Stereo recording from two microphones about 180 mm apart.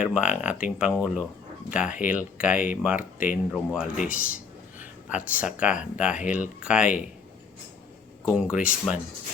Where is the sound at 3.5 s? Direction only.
5° right (ahead or behind).